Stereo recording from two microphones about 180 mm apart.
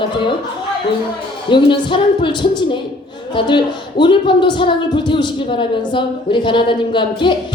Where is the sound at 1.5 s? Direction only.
25° left (ahead or behind).